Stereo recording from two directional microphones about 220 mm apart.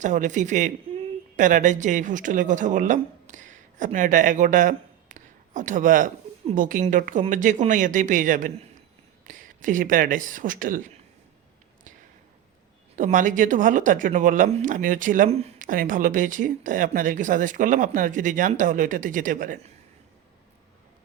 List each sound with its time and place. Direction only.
0.0 s a woman's voice: 35° right (ahead or behind)
13.0 s speech: 35° right (ahead or behind)